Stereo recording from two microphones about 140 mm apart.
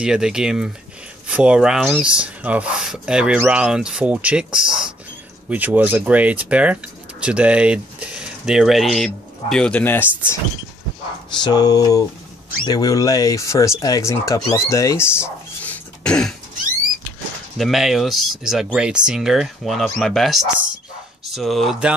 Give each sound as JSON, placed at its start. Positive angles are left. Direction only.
{"t": 0.0, "sound": "speech", "side_deg": -5}
{"t": 11.4, "sound": "speech", "side_deg": 30}
{"t": 17.6, "sound": "speech", "side_deg": 0}